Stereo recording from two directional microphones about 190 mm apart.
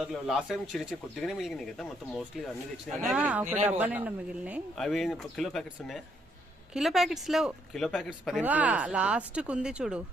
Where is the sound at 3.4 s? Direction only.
40° right (ahead or behind).